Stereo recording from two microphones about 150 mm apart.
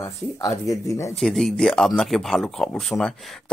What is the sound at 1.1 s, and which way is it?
Speech, 5° left (ahead or behind).